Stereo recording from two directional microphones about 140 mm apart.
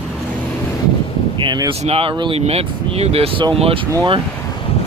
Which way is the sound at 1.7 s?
45° right (ahead or behind).